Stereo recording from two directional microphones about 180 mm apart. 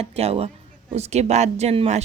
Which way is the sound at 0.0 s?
35° right (ahead or behind).